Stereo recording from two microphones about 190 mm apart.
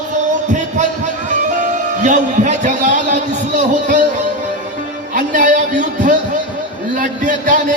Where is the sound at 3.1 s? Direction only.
40° right (ahead or behind).